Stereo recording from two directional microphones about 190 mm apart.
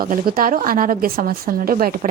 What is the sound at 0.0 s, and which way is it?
Speech, 50° right (ahead or behind).